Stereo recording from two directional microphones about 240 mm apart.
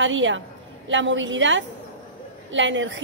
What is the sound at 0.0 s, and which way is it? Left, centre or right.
A woman's voice, right.